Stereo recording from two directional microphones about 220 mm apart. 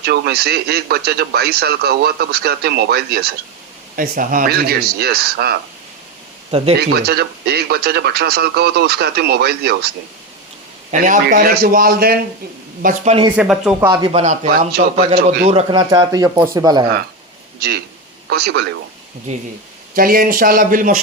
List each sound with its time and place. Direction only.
0.0 s speech: 45° right (ahead or behind)
6.7 s speech: 45° right (ahead or behind)
11.0 s a man's voice: 35° right (ahead or behind)
13.3 s speech: 5° right (ahead or behind)
13.8 s speech: 20° right (ahead or behind)
14.7 s speech: 45° right (ahead or behind)
15.4 s speech: 25° right (ahead or behind)
18.3 s speech: 45° right (ahead or behind)
20.0 s a man's voice: 40° right (ahead or behind)